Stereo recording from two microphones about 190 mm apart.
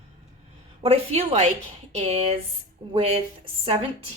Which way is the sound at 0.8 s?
30° right (ahead or behind).